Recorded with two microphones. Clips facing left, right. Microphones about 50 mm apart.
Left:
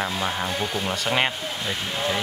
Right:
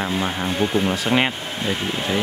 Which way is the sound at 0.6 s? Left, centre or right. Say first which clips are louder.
Right 7 dB; right.